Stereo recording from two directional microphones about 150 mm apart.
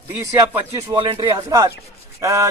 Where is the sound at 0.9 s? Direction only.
30° right (ahead or behind).